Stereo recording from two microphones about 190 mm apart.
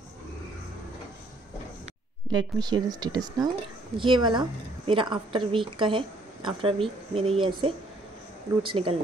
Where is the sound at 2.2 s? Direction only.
20° right (ahead or behind).